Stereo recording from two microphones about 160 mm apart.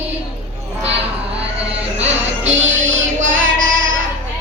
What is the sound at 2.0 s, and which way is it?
Music, 45° right (ahead or behind).